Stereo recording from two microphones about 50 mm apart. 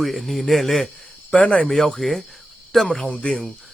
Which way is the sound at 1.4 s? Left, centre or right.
Left.